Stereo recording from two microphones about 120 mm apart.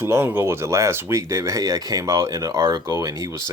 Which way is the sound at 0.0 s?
20° right (ahead or behind).